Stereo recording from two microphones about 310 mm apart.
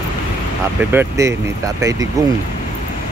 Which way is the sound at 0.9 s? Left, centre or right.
Centre.